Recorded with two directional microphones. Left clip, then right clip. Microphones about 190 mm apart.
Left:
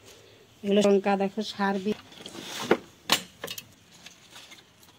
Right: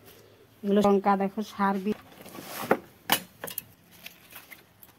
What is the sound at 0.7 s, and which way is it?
Speech, 30° right (ahead or behind).